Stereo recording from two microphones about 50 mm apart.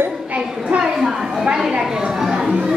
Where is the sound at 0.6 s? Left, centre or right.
Centre.